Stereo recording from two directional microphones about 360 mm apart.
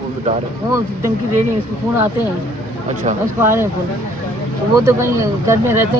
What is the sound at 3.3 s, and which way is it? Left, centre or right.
Speech, centre.